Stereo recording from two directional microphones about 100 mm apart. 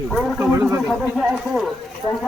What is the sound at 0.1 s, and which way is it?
Speech, 5° left (ahead or behind).